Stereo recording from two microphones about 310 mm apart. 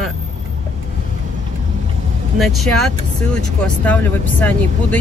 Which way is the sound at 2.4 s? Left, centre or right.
Centre.